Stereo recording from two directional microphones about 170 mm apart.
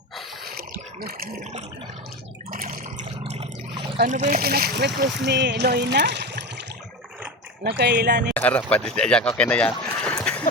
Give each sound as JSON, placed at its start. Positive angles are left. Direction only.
{"t": 2.5, "sound": "water", "side_deg": -55}
{"t": 4.0, "sound": "speech", "side_deg": -50}
{"t": 4.4, "sound": "speech", "side_deg": -65}
{"t": 7.6, "sound": "speech", "side_deg": -75}
{"t": 8.3, "sound": "speech", "side_deg": 10}